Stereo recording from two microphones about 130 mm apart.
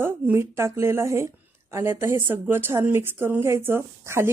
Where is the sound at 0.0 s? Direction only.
20° right (ahead or behind).